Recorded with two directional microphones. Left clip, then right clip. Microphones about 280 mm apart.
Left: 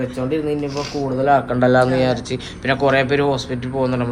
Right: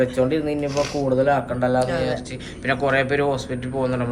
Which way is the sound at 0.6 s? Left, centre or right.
Right.